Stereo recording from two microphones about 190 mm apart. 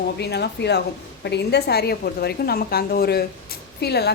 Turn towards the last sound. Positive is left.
turn(degrees=60)  # may be behind; listen again after turning